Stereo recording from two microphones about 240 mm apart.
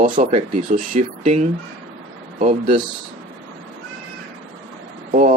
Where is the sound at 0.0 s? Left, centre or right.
Right.